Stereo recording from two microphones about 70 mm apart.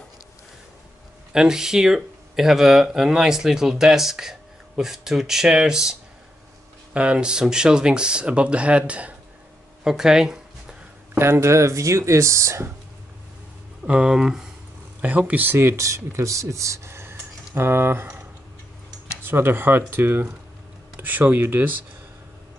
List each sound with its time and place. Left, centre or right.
1.3 s speech: centre
9.8 s a sound: centre
11.1 s speech: right
13.8 s speech: centre
15.0 s speech: right
15.5 s speech: right
19.2 s speech: right